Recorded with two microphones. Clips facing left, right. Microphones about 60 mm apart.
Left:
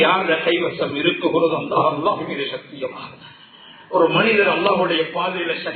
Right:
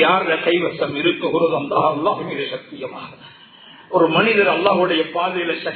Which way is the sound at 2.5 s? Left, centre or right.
Right.